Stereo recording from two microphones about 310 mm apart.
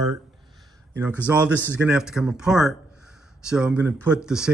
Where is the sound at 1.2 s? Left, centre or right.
Centre.